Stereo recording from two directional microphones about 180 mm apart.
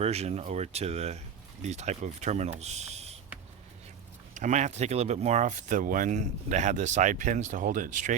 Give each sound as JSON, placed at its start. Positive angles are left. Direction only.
{"t": 0.0, "sound": "speech", "side_deg": -35}
{"t": 4.4, "sound": "speech", "side_deg": -40}